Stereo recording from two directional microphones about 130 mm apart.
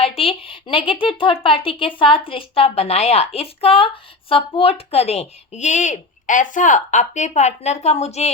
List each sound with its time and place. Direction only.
0.2 s a woman's voice: 45° left (ahead or behind)